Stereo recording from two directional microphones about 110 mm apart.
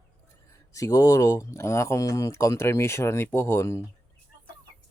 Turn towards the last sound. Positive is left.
turn(degrees=25)  # may be behind; listen again after turning